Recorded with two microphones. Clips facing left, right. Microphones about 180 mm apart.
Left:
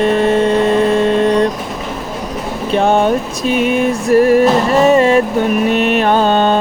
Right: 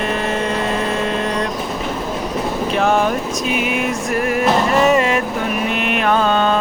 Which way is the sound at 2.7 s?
30° left (ahead or behind).